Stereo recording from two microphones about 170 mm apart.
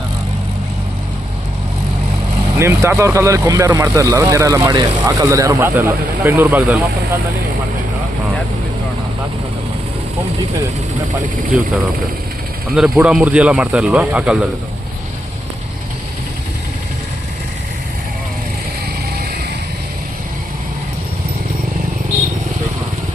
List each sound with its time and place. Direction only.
2.6 s speech: 15° right (ahead or behind)
12.7 s speech: 5° right (ahead or behind)